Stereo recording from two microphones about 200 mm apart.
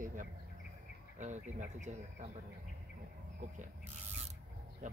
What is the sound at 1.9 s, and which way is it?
Speech, 35° right (ahead or behind).